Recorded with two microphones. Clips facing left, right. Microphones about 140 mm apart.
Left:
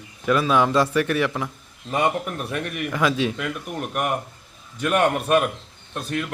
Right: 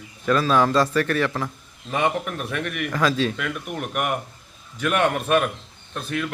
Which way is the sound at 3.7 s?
35° left (ahead or behind).